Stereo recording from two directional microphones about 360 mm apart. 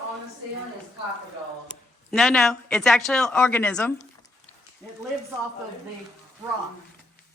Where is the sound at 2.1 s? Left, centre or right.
Centre.